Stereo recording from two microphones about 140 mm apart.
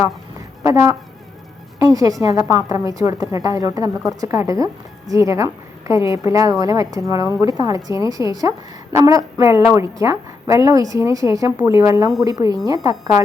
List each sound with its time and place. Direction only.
0.6 s a woman's voice: 20° right (ahead or behind)